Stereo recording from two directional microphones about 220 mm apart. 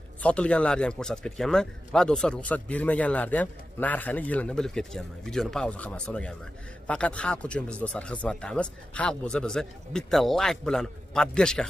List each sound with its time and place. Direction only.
0.2 s a man's voice: 5° left (ahead or behind)